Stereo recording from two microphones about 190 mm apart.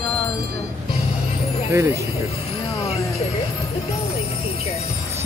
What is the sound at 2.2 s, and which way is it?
Music, 30° left (ahead or behind).